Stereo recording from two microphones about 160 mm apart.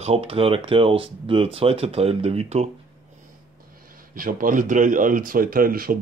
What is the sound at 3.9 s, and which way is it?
Speech, 60° right (ahead or behind).